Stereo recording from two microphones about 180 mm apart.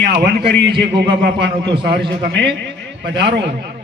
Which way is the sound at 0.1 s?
65° right (ahead or behind).